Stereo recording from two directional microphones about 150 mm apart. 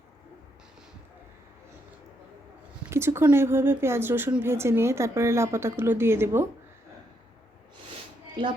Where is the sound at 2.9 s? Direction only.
15° right (ahead or behind).